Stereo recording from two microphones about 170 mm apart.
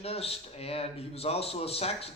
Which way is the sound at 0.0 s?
35° left (ahead or behind).